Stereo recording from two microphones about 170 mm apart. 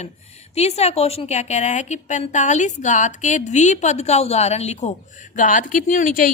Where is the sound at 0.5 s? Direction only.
40° left (ahead or behind).